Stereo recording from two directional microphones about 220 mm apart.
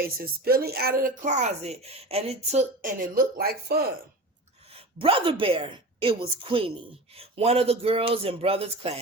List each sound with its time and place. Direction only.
0.0 s speech: 45° right (ahead or behind)
4.7 s a woman's voice: 25° right (ahead or behind)